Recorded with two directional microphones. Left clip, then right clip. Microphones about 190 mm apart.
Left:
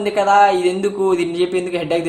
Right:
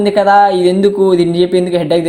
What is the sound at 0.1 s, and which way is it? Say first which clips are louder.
Speech: right 3 dB; 30° right (ahead or behind).